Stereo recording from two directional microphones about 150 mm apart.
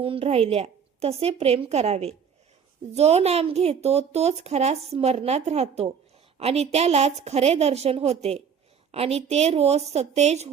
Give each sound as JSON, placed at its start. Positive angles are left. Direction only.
{"t": 0.0, "sound": "speech", "side_deg": -40}